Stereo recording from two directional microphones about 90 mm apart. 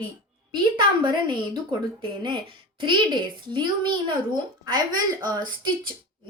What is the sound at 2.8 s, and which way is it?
A woman's voice, 60° right (ahead or behind).